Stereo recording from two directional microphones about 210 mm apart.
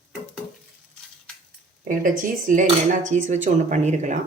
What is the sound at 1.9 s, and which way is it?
Speech, 40° right (ahead or behind).